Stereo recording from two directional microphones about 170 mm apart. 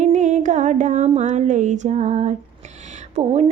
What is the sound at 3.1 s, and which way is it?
Speech, 40° right (ahead or behind).